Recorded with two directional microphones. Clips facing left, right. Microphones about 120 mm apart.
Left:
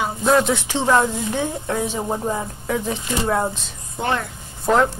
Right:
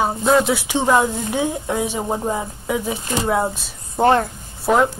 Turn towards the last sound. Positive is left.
turn(degrees=-5)  # may be behind; listen again after turning